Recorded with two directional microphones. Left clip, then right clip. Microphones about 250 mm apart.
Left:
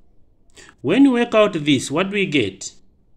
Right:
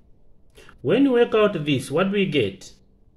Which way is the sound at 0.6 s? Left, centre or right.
Left.